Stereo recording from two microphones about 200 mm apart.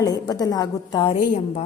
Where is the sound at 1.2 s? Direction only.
40° left (ahead or behind).